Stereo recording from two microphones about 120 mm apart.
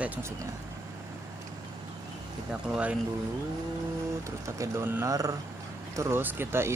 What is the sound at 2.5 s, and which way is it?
Speech, 10° right (ahead or behind).